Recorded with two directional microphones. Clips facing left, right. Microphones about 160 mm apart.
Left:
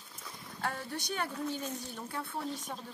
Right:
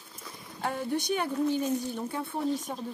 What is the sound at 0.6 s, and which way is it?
Speech, 15° right (ahead or behind).